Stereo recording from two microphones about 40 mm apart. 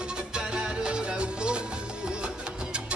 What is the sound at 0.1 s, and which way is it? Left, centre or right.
Music, right.